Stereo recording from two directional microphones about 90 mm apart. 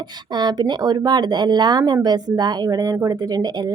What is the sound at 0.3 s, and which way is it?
A woman's voice, 55° right (ahead or behind).